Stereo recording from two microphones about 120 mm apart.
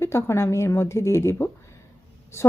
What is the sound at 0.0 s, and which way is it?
A woman's voice, 20° left (ahead or behind).